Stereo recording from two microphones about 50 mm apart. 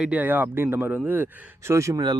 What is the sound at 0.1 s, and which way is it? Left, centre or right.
Speech, right.